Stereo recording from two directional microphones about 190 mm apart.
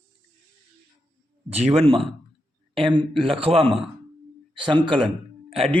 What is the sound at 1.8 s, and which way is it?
Speech, 30° right (ahead or behind).